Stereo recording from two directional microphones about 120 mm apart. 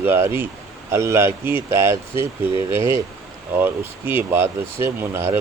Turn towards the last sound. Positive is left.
turn(degrees=-20)  # may be behind; listen again after turning